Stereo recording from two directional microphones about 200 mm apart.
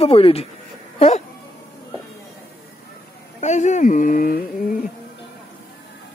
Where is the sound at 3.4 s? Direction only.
35° left (ahead or behind).